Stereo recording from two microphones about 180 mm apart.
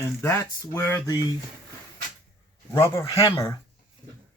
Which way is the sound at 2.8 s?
15° left (ahead or behind).